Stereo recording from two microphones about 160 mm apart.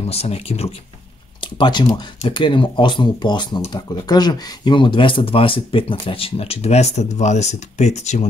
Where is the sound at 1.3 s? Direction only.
30° left (ahead or behind).